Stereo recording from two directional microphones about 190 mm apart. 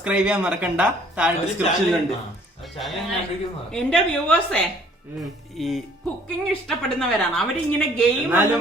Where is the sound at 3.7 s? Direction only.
5° left (ahead or behind).